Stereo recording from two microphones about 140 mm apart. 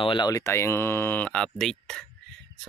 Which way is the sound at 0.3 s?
20° left (ahead or behind).